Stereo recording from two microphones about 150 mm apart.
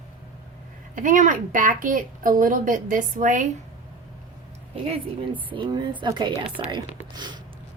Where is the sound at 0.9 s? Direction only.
60° right (ahead or behind).